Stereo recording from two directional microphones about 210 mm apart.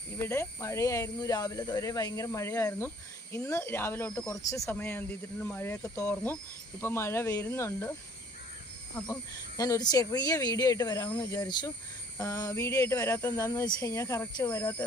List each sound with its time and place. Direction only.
0.2 s speech: 15° left (ahead or behind)
9.6 s speech: 15° left (ahead or behind)